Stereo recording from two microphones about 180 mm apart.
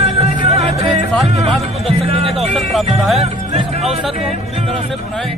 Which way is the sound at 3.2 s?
35° right (ahead or behind).